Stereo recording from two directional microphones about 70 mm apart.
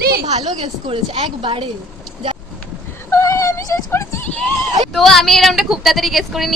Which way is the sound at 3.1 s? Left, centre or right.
Left.